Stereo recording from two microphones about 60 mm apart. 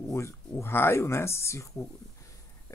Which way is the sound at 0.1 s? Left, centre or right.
Left.